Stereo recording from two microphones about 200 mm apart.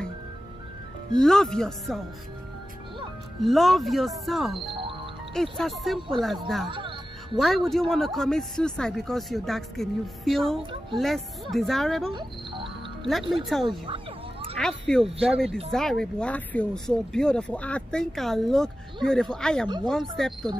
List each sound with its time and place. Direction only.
1.2 s speech: centre (ahead or behind)
3.4 s speech: centre (ahead or behind)
5.9 s speech: 25° right (ahead or behind)
6.4 s speech: centre (ahead or behind)
6.7 s music: 25° right (ahead or behind)
7.3 s speech: centre (ahead or behind)
12.1 s music: 25° right (ahead or behind)
13.0 s speech: centre (ahead or behind)
13.7 s cat: 25° right (ahead or behind)
14.6 s speech: 5° left (ahead or behind)
15.1 s speech: 30° right (ahead or behind)
15.7 s speech: centre (ahead or behind)